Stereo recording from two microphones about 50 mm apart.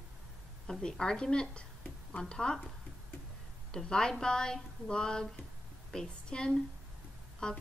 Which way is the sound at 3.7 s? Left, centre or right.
Centre.